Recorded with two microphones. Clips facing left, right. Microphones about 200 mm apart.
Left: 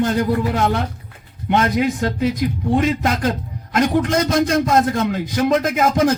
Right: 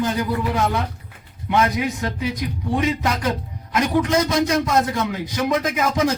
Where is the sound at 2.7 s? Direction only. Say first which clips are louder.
Left 2 dB; 50° left (ahead or behind).